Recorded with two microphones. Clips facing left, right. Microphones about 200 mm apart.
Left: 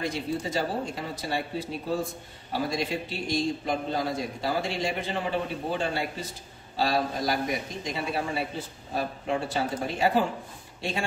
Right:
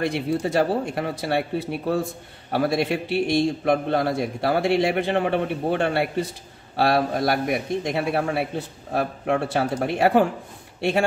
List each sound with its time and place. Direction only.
0.0 s a man's voice: 65° right (ahead or behind)